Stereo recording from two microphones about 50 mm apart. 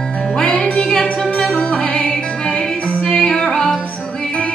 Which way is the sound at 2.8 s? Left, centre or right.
Left.